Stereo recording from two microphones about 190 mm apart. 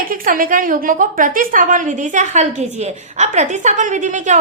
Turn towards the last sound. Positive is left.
turn(degrees=-40)  # may be behind; listen again after turning